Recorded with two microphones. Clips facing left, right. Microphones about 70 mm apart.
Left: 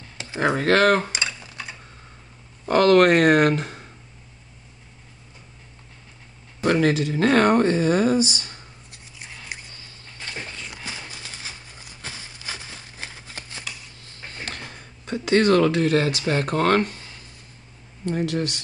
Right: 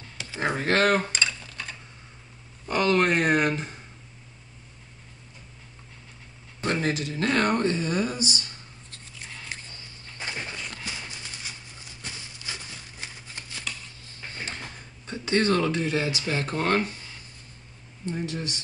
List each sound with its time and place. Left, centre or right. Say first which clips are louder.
0.7 s speech: left 5 dB; left
1.0 s dishes: even; centre
2.7 s speech: left 7 dB; left
6.7 s speech: left 7 dB; left
8.9 s scissors: even; centre
10.1 s a sound: right 1 dB; centre
10.8 s horse: left 1 dB; left
13.7 s a sound: right 3 dB; centre
15.2 s speech: left 6 dB; left
16.3 s speech: left 6 dB; left
18.0 s speech: left 7 dB; left